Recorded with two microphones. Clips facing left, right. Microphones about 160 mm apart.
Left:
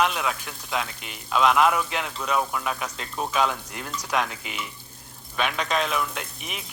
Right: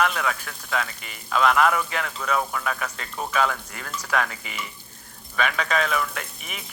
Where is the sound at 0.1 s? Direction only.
10° left (ahead or behind).